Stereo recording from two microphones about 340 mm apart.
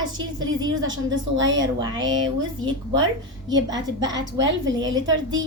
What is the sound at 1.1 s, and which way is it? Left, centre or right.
Speech, right.